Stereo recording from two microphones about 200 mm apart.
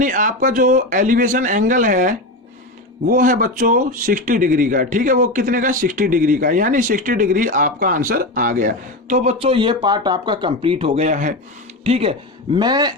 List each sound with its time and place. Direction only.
0.0 s speech: 40° right (ahead or behind); by 12.9 s 20° right (ahead or behind)